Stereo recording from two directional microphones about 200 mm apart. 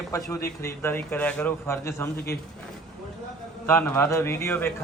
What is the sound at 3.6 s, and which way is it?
Speech, 10° left (ahead or behind).